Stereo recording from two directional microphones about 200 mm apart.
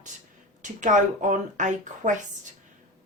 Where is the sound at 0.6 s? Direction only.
40° right (ahead or behind).